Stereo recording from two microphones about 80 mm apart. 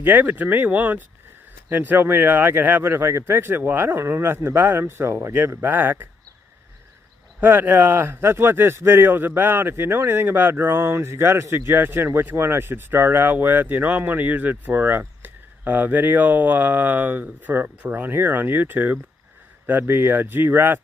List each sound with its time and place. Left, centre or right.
0.0 s speech: right
7.3 s speech: right